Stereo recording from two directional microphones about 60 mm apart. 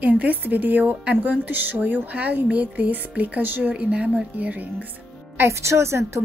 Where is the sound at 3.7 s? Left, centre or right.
Centre.